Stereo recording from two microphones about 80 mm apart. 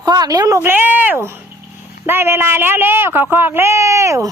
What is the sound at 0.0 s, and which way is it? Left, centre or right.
Speech, right.